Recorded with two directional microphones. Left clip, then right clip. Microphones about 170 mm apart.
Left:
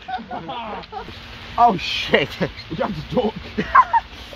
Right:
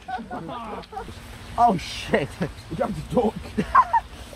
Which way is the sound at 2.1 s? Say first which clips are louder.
Left 5 dB; centre (ahead or behind).